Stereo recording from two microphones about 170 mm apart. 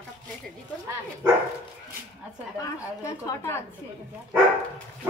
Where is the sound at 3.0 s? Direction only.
20° left (ahead or behind).